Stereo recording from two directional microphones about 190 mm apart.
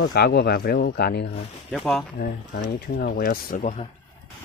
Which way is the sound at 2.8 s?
55° left (ahead or behind).